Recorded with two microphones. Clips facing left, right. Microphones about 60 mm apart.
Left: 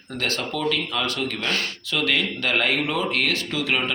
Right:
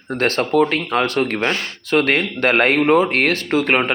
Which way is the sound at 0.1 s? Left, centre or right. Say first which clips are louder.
Right 9 dB; right.